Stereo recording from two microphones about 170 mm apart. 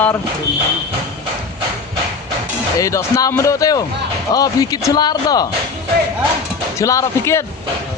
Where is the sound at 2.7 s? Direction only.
20° left (ahead or behind).